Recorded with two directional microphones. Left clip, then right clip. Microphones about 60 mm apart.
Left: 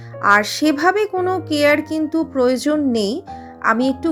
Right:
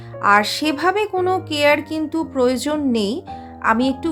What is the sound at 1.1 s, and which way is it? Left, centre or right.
A woman's voice, left.